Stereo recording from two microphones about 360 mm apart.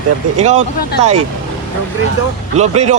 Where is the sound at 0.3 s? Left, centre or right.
Centre.